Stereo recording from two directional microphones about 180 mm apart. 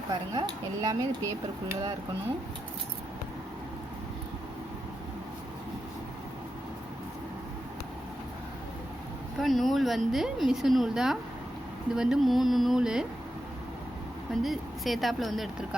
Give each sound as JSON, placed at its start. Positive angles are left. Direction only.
{"t": 0.1, "sound": "speech", "side_deg": -20}
{"t": 9.4, "sound": "a woman's voice", "side_deg": 0}
{"t": 14.4, "sound": "a woman's voice", "side_deg": 0}